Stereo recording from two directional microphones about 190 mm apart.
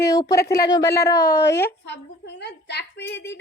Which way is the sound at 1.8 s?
65° left (ahead or behind).